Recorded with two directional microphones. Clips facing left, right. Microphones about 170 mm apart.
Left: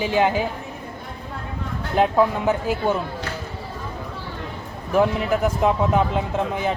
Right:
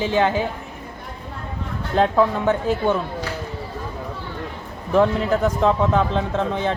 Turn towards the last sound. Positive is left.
turn(degrees=10)  # may be behind; listen again after turning